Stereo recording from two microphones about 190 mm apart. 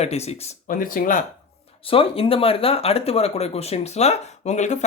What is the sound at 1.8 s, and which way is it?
Speech, 30° left (ahead or behind).